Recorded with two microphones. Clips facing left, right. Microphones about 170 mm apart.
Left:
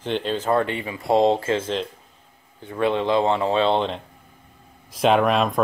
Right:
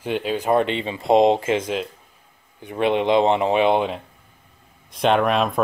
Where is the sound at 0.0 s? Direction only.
10° right (ahead or behind).